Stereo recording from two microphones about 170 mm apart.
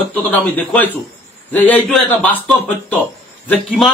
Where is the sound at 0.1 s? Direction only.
10° left (ahead or behind).